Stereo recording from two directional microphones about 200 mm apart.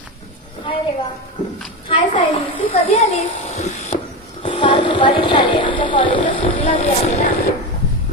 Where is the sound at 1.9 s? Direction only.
25° left (ahead or behind).